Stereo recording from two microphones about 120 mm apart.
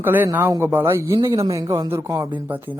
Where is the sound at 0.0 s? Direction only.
15° right (ahead or behind).